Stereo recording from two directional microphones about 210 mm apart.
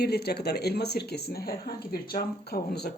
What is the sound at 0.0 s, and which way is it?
Speech, 50° left (ahead or behind).